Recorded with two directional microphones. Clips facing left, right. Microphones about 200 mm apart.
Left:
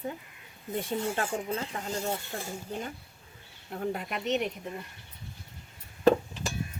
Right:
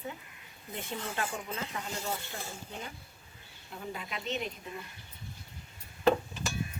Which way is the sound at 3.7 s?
60° left (ahead or behind).